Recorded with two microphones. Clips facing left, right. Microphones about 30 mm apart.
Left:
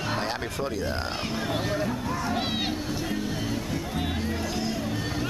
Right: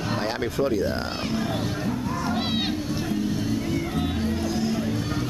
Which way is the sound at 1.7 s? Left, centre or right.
Centre.